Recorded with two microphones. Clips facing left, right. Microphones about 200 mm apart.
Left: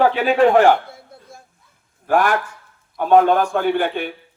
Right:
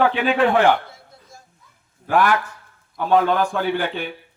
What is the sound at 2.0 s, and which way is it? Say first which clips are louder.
Speech: left 1 dB; 45° left (ahead or behind).